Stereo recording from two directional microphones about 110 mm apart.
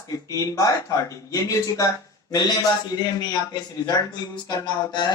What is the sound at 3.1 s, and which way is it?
Speech, 40° left (ahead or behind).